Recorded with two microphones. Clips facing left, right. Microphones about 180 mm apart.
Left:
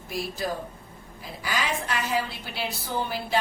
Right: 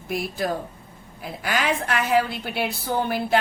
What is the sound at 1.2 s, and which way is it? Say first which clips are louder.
A woman's voice: right 4 dB; 65° right (ahead or behind).